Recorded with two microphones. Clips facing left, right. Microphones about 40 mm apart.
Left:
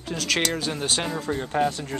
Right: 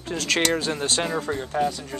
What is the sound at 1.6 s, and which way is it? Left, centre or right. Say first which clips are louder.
Speech: left 1 dB; centre.